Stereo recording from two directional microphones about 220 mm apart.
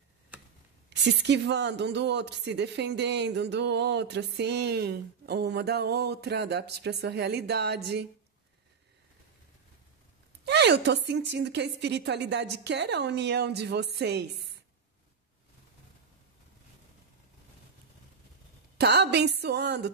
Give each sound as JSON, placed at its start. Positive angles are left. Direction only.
{"t": 0.3, "sound": "tick", "side_deg": -5}
{"t": 0.8, "sound": "speech", "side_deg": -50}
{"t": 10.4, "sound": "speech", "side_deg": -50}
{"t": 18.8, "sound": "speech", "side_deg": -50}